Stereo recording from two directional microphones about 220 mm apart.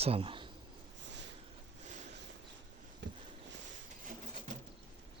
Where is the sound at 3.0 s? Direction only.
55° right (ahead or behind).